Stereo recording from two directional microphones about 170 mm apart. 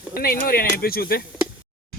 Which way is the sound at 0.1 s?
60° left (ahead or behind).